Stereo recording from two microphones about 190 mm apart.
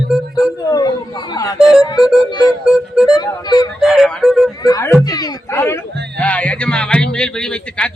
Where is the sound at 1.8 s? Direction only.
20° left (ahead or behind).